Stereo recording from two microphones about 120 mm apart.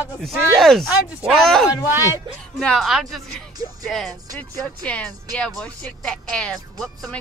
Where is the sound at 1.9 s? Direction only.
20° right (ahead or behind).